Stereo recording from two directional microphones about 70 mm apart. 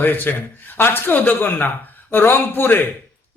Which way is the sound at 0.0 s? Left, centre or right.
Left.